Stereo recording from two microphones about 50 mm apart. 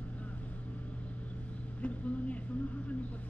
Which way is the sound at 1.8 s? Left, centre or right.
Left.